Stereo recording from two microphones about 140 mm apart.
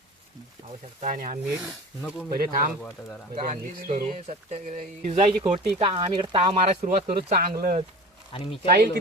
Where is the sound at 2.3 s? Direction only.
90° right.